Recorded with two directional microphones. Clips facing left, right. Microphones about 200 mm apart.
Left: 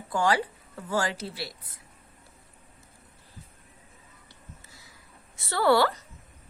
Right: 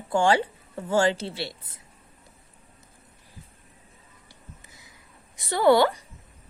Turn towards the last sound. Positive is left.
turn(degrees=-20)  # may be behind; listen again after turning